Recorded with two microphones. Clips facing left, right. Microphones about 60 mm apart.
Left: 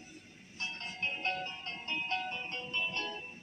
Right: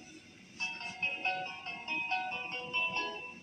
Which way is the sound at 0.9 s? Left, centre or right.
Right.